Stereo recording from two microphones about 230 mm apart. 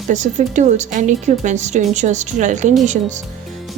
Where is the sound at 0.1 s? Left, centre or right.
Right.